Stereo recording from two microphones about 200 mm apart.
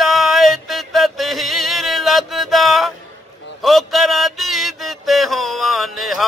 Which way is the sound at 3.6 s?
Centre (ahead or behind).